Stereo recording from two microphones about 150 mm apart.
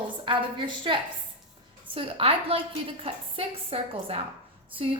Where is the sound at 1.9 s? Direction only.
40° right (ahead or behind).